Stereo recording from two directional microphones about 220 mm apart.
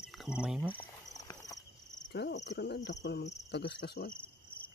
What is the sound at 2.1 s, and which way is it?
Cricket, 50° left (ahead or behind).